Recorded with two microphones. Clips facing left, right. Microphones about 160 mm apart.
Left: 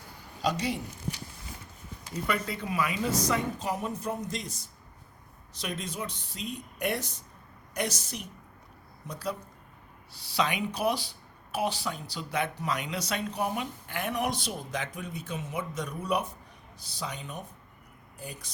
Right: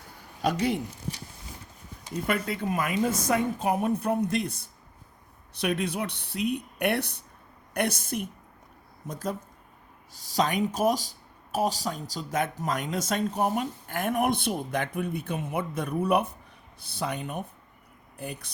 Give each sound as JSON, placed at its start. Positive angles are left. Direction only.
{"t": 0.4, "sound": "a woman's voice", "side_deg": -55}
{"t": 2.2, "sound": "a woman's voice", "side_deg": -50}